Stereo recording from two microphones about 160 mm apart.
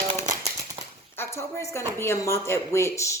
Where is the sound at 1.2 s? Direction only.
15° left (ahead or behind).